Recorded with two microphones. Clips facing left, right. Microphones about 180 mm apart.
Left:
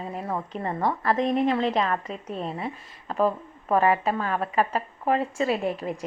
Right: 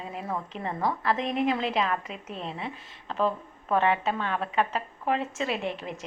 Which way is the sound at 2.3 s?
40° left (ahead or behind).